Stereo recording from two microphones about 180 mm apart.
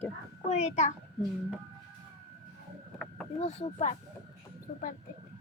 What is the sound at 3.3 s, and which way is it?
Speech, 35° left (ahead or behind).